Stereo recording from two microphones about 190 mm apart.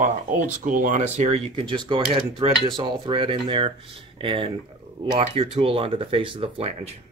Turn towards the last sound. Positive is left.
turn(degrees=-35)  # may be behind; listen again after turning